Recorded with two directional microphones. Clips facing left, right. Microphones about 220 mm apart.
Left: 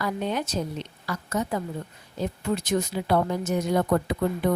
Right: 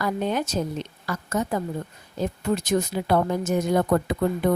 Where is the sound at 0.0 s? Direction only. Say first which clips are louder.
Right 3 dB; 45° right (ahead or behind).